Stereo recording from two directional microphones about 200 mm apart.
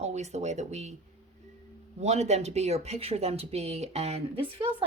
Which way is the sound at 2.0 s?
35° right (ahead or behind).